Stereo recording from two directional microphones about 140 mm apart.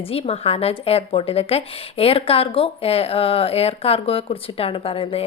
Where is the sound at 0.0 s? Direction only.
45° left (ahead or behind).